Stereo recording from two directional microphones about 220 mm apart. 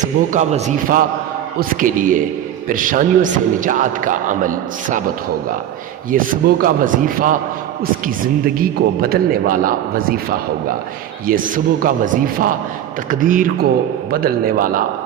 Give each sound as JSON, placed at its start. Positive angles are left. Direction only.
{"t": 0.0, "sound": "a man's voice", "side_deg": -35}
{"t": 6.1, "sound": "a man's voice", "side_deg": -40}